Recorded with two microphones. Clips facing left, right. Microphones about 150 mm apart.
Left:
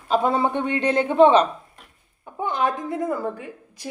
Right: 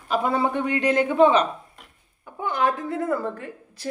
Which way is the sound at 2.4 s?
20° left (ahead or behind).